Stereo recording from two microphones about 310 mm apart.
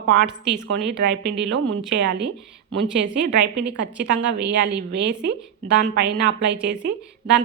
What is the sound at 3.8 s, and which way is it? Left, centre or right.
A woman's voice, right.